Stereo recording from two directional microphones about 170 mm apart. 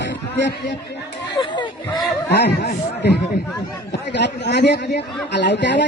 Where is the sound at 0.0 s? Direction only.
90° left.